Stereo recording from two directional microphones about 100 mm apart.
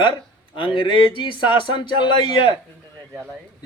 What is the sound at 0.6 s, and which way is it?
Speech, 60° left (ahead or behind).